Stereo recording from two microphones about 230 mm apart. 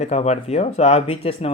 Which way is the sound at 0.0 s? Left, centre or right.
Left.